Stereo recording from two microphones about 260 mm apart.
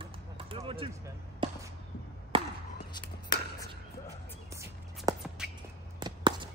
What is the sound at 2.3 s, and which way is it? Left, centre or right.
Chop, right.